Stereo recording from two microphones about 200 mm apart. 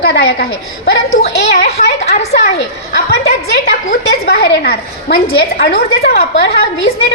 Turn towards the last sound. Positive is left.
turn(degrees=55)  # may be behind; listen again after turning